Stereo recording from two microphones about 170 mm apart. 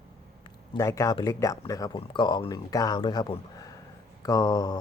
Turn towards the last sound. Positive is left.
turn(degrees=25)  # may be behind; listen again after turning